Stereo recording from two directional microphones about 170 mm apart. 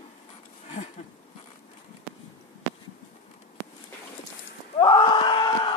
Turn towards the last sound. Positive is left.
turn(degrees=30)  # may be behind; listen again after turning